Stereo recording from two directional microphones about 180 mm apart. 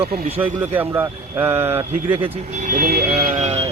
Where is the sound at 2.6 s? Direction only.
55° right (ahead or behind).